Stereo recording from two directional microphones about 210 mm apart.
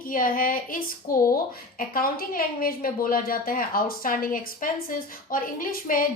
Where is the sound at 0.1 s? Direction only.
40° left (ahead or behind).